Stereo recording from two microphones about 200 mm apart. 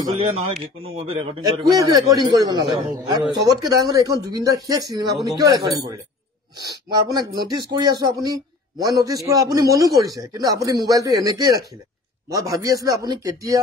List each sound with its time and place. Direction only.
0.9 s a man's voice: 30° right (ahead or behind)
6.9 s a man's voice: 20° right (ahead or behind)